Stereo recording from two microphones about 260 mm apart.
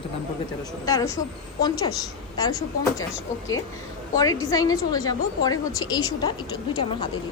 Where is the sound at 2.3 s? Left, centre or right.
Centre.